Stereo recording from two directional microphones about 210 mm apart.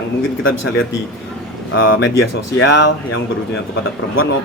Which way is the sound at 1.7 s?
60° left (ahead or behind).